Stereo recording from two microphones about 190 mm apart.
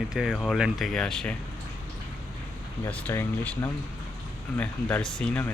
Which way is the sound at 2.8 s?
10° left (ahead or behind).